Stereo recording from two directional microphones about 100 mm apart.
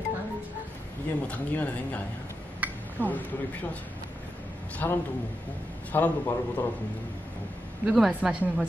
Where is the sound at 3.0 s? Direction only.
15° left (ahead or behind).